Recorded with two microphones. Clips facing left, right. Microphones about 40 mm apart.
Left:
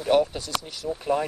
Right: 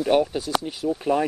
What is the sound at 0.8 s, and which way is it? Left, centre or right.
Speech, centre.